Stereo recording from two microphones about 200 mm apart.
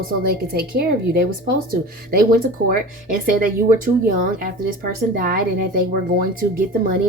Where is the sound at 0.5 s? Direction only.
50° right (ahead or behind).